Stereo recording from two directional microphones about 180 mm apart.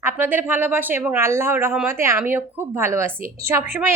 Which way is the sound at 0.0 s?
10° right (ahead or behind).